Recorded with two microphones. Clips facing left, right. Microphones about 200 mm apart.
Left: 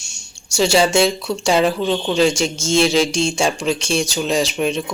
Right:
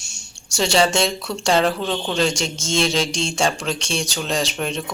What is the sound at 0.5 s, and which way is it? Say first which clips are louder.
Speech: left 3 dB; 5° left (ahead or behind).